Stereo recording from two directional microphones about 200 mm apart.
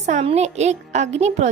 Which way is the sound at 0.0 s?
35° right (ahead or behind).